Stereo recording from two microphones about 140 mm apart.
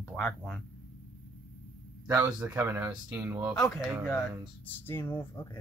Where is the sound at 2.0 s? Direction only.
15° right (ahead or behind).